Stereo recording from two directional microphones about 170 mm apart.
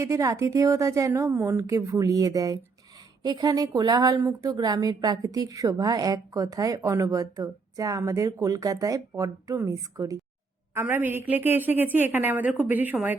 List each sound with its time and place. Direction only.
0.0 s a woman's voice: 15° right (ahead or behind)